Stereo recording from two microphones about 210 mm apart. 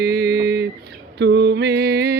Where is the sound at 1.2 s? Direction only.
55° right (ahead or behind).